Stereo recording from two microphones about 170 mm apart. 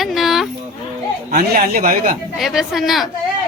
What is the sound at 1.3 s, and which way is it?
Speech, 50° right (ahead or behind).